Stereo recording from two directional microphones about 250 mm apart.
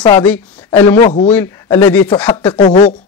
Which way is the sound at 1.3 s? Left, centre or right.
Centre.